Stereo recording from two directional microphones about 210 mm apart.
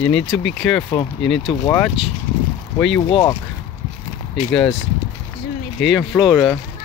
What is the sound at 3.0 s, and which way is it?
Speech, 25° left (ahead or behind).